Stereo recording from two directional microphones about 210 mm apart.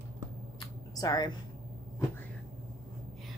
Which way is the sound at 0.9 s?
15° left (ahead or behind).